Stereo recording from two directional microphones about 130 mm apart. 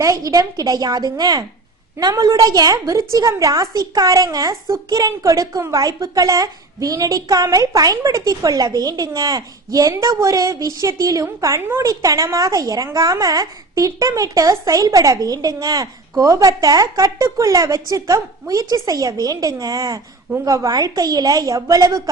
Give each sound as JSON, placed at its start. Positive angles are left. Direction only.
{"t": 0.0, "sound": "a woman's voice", "side_deg": -25}